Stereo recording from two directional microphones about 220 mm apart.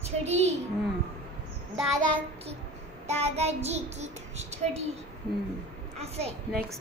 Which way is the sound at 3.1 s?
30° right (ahead or behind).